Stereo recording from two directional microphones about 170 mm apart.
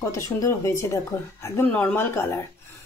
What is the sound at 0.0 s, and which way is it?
Speech, 15° left (ahead or behind).